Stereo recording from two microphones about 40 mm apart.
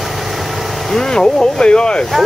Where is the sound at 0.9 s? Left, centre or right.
Centre.